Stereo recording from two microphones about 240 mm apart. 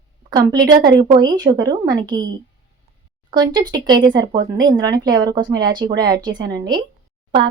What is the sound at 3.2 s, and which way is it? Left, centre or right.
A woman's voice, centre.